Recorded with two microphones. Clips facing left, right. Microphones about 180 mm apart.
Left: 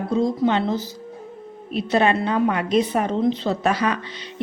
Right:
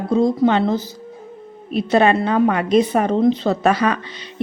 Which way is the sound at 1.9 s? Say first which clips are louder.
Right 4 dB; 55° right (ahead or behind).